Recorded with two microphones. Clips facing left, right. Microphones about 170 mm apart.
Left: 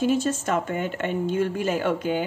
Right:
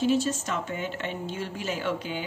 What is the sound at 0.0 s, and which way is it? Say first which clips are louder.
A woman's voice: left 2 dB; 50° left (ahead or behind).